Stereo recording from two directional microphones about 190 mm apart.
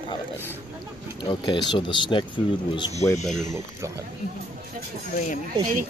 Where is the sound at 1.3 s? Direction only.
25° left (ahead or behind).